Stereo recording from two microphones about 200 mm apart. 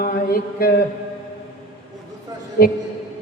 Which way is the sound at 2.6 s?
50° left (ahead or behind).